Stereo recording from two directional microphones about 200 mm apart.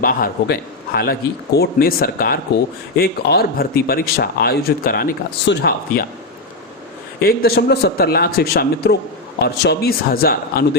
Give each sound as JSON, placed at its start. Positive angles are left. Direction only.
{"t": 0.0, "sound": "a man's voice", "side_deg": 50}
{"t": 7.2, "sound": "speech", "side_deg": 50}